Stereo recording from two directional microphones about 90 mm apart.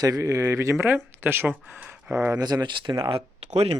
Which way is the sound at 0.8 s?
25° right (ahead or behind).